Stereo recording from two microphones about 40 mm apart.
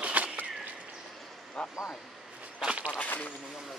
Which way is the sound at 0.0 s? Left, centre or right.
Right.